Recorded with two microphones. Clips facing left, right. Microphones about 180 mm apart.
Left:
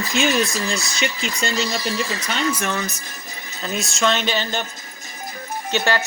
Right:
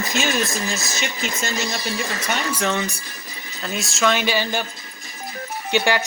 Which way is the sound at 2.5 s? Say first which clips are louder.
Right 2 dB; 15° right (ahead or behind).